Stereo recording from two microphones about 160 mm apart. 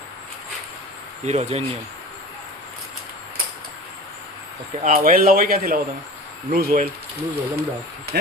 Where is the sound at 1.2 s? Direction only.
45° right (ahead or behind).